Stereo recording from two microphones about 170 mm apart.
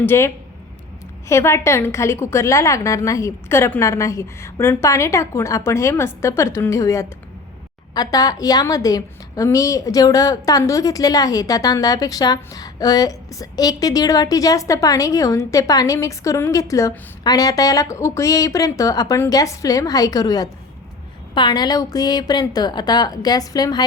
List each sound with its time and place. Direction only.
0.0 s a woman's voice: 15° left (ahead or behind)
1.3 s a woman's voice: 15° left (ahead or behind)